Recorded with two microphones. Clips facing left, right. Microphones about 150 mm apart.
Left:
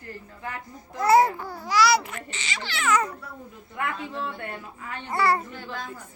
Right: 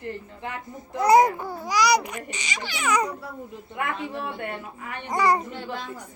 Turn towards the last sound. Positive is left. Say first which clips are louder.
# right 3 dB
turn(degrees=-25)  # may be behind; listen again after turning